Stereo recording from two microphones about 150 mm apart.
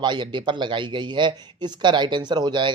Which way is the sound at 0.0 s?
30° right (ahead or behind).